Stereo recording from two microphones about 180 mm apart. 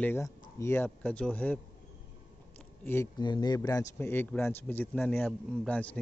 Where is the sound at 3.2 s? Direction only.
25° left (ahead or behind).